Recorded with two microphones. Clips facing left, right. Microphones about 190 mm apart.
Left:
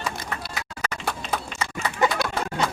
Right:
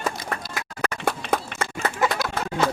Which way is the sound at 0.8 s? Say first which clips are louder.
Right 5 dB; 60° right (ahead or behind).